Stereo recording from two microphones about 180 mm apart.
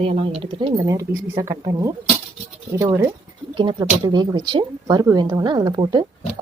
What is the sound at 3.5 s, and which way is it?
A woman's voice, 25° right (ahead or behind).